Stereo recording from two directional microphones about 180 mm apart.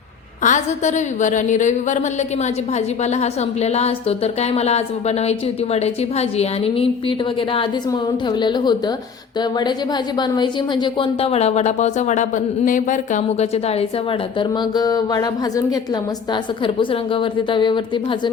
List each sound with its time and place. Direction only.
0.4 s a woman's voice: 40° left (ahead or behind); by 18.2 s 25° left (ahead or behind)